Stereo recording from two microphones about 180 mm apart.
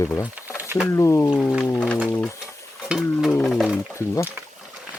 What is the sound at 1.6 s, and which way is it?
Speech, 10° left (ahead or behind).